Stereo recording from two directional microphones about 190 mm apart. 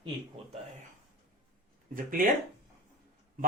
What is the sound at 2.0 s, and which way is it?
Speech, 45° right (ahead or behind).